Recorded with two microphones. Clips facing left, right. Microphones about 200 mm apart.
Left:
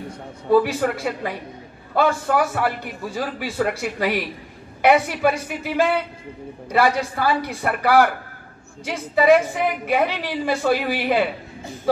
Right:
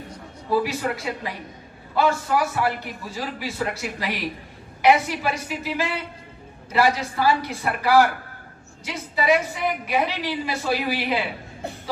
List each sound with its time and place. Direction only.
0.5 s a man's voice: 55° left (ahead or behind)